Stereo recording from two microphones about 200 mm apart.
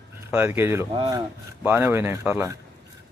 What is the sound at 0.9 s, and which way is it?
Speech, 25° right (ahead or behind).